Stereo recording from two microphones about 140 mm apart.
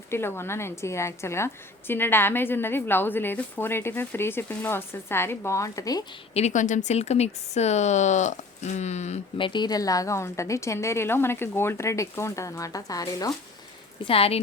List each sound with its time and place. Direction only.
0.1 s a woman's voice: 15° left (ahead or behind)
6.3 s speech: 55° left (ahead or behind)
9.4 s a woman's voice: 30° left (ahead or behind)
14.0 s speech: 45° left (ahead or behind)